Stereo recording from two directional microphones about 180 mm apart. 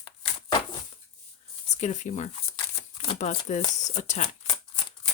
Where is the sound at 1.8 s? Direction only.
40° left (ahead or behind).